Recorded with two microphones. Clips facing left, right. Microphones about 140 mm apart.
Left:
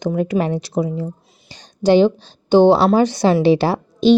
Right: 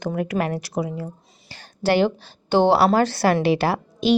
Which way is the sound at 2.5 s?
15° left (ahead or behind).